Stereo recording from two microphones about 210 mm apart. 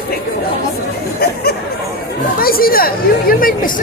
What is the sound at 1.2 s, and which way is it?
Speech, 45° left (ahead or behind).